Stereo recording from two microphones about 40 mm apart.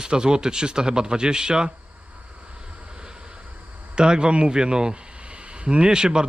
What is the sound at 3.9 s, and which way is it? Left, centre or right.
Speech, right.